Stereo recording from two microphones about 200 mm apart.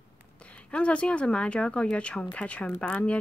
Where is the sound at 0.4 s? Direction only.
5° left (ahead or behind).